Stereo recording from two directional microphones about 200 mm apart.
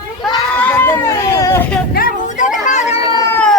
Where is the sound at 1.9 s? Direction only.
40° left (ahead or behind).